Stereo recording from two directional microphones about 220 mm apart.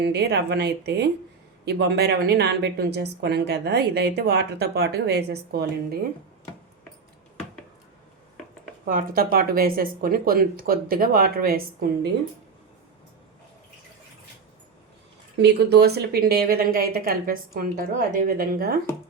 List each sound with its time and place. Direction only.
0.0 s a woman's voice: 50° right (ahead or behind)
8.9 s speech: 40° right (ahead or behind)
15.4 s a woman's voice: 50° right (ahead or behind)